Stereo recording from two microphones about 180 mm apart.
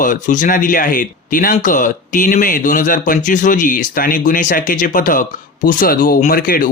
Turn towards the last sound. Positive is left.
turn(degrees=50)  # may be behind; listen again after turning